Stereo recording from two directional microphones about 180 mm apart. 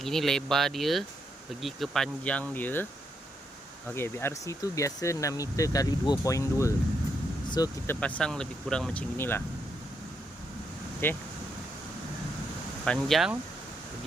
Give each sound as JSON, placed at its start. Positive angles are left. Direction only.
{"t": 0.0, "sound": "speech", "side_deg": 0}
{"t": 3.8, "sound": "speech", "side_deg": 15}
{"t": 7.9, "sound": "speech", "side_deg": 10}
{"t": 11.0, "sound": "speech", "side_deg": 10}
{"t": 12.8, "sound": "speech", "side_deg": 5}